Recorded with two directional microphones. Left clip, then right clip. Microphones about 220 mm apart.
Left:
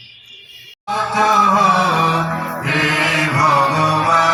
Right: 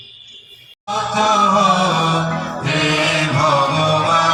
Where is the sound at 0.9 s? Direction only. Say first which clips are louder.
Left 1 dB; 55° right (ahead or behind).